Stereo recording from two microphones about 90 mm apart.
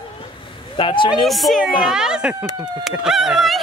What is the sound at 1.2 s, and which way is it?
A woman's voice, centre (ahead or behind).